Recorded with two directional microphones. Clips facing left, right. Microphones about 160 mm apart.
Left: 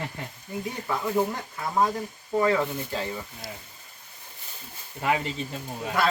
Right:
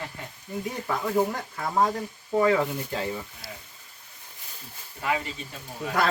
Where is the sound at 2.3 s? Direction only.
15° right (ahead or behind).